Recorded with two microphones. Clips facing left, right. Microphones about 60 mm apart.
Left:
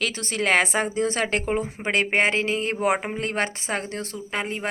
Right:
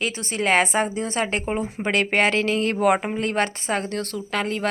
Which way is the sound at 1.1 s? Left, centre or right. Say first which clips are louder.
Even; left.